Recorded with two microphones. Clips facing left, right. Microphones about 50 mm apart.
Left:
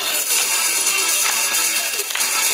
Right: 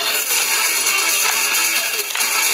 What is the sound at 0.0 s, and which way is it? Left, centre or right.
Music, right.